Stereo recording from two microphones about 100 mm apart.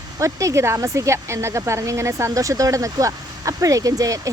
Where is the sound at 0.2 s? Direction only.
30° right (ahead or behind).